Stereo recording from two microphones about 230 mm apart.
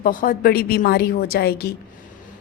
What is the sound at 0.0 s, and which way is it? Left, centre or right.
A woman's voice, left.